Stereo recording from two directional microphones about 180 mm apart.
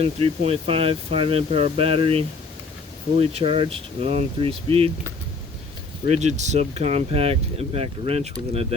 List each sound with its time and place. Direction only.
0.0 s speech: 35° right (ahead or behind)
6.1 s speech: 40° right (ahead or behind)